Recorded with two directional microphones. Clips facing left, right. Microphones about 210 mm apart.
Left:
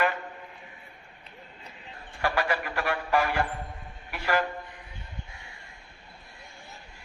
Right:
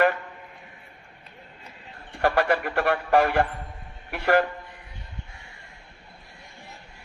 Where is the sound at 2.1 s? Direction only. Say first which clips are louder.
Right 6 dB; 55° right (ahead or behind).